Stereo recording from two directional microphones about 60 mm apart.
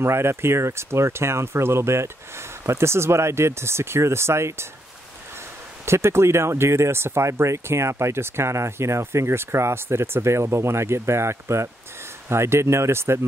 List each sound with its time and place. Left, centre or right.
0.0 s speech: right
5.9 s speech: right